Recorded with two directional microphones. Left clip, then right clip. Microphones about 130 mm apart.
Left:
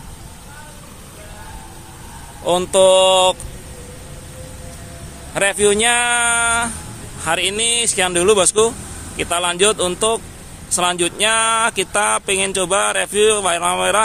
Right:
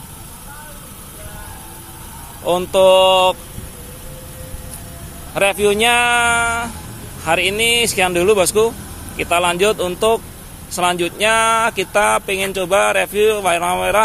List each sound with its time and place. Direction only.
2.4 s speech: 25° left (ahead or behind)
5.3 s speech: 20° left (ahead or behind)